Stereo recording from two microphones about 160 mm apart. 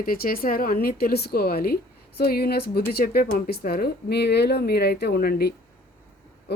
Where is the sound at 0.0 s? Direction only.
65° left (ahead or behind).